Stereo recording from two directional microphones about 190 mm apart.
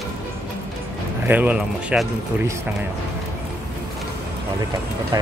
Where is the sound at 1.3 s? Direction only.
5° right (ahead or behind).